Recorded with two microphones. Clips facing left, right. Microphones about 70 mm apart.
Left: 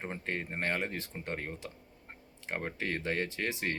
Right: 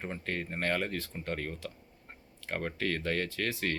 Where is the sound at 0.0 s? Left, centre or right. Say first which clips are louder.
Right 1 dB; left.